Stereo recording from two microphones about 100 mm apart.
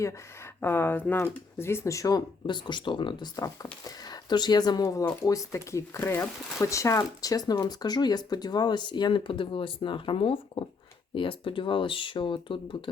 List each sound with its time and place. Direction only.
0.6 s speech: 20° left (ahead or behind)
2.5 s speech: 50° left (ahead or behind)
3.3 s speech: 35° left (ahead or behind); by 12.9 s 60° left (ahead or behind)